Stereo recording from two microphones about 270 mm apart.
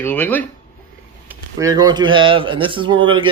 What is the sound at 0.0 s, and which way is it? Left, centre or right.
Speech, centre.